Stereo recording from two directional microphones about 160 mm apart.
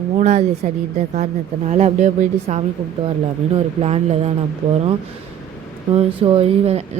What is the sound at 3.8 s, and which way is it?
Speech, 40° right (ahead or behind).